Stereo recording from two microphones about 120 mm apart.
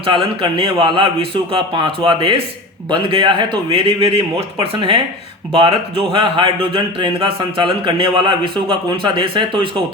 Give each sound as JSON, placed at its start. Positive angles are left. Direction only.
{"t": 0.0, "sound": "speech", "side_deg": -45}
{"t": 6.1, "sound": "speech", "side_deg": -45}